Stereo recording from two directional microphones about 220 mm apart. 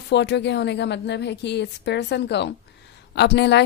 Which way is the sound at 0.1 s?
50° left (ahead or behind).